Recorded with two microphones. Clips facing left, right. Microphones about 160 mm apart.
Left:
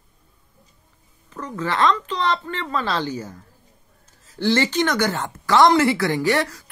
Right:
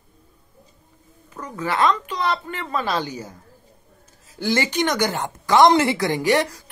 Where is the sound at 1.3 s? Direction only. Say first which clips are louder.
Even; 10° right (ahead or behind).